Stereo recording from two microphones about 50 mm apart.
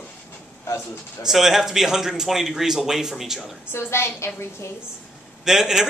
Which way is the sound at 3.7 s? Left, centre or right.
Left.